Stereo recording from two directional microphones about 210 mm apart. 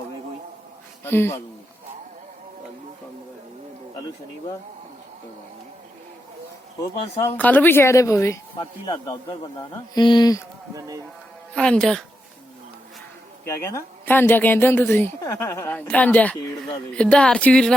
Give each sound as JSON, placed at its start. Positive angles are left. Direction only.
{"t": 1.0, "sound": "speech", "side_deg": 10}
{"t": 7.3, "sound": "speech", "side_deg": 10}
{"t": 10.8, "sound": "speech", "side_deg": -15}
{"t": 11.5, "sound": "speech", "side_deg": 5}
{"t": 13.4, "sound": "speech", "side_deg": 10}